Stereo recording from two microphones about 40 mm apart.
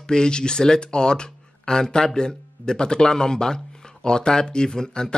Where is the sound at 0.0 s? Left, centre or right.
Left.